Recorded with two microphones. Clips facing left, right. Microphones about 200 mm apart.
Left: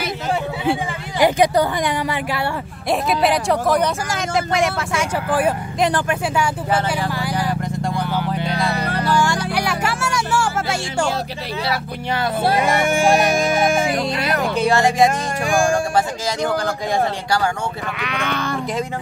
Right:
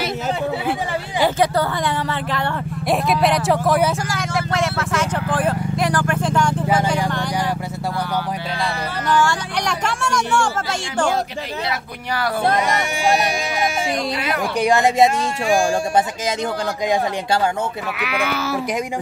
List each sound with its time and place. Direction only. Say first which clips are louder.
1.2 s speech: left 3 dB; 15° left (ahead or behind)
2.9 s speech: even; centre (ahead or behind)
4.1 s speech: left 2 dB; 15° left (ahead or behind)
5.8 s speech: left 3 dB; 20° left (ahead or behind)
6.2 s speech: right 3 dB; 10° left (ahead or behind)
7.1 s a sound: even; 5° left (ahead or behind)
9.1 s music: right 1 dB; 15° left (ahead or behind)
12.4 s speech: left 2 dB; 5° left (ahead or behind)
12.8 s speech: left 4 dB; 50° left (ahead or behind)
14.6 s speech: right 1 dB; 20° right (ahead or behind)
16.6 s speech: even; 20° right (ahead or behind)
17.9 s speech: right 1 dB; 5° right (ahead or behind)